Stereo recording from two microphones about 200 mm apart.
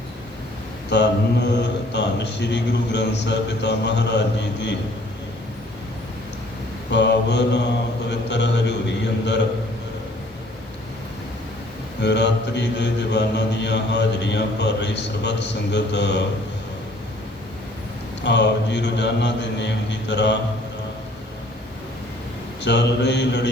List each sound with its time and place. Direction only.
0.9 s mantra: 60° left (ahead or behind)
6.9 s mantra: 60° left (ahead or behind)
11.9 s mantra: 60° left (ahead or behind)
18.2 s mantra: 60° left (ahead or behind)
22.6 s mantra: 60° left (ahead or behind)